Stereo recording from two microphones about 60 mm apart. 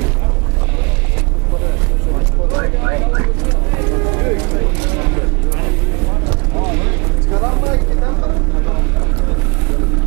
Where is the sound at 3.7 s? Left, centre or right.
Right.